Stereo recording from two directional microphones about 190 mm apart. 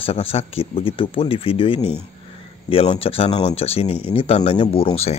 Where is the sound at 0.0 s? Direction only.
30° left (ahead or behind).